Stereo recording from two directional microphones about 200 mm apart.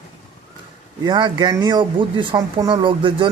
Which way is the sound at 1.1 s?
20° right (ahead or behind).